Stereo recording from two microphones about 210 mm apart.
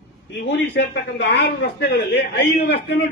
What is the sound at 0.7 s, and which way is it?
A man's voice, 55° left (ahead or behind).